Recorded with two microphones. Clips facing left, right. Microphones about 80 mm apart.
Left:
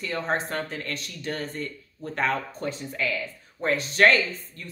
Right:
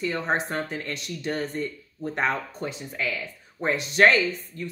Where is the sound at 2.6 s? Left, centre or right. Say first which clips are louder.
Left 2 dB; centre.